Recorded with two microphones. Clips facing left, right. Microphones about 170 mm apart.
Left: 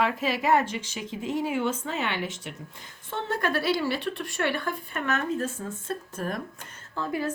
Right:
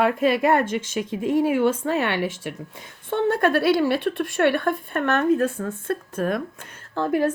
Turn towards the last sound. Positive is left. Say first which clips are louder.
# right 8 dB
turn(degrees=-60)  # may be behind; listen again after turning